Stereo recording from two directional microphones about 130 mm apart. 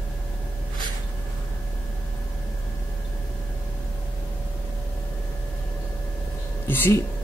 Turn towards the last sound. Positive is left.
turn(degrees=20)  # may be behind; listen again after turning